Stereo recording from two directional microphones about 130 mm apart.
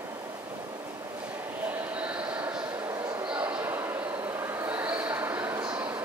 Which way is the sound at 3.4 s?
15° right (ahead or behind).